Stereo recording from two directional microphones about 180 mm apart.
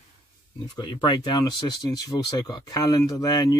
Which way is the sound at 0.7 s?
25° left (ahead or behind).